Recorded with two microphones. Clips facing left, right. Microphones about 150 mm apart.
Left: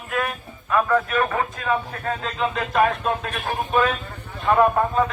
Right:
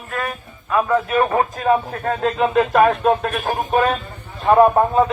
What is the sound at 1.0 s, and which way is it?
Speech, 30° right (ahead or behind).